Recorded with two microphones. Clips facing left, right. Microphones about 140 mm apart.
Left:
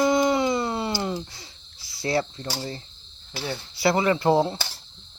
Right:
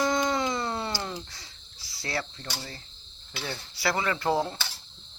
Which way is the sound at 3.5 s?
20° left (ahead or behind).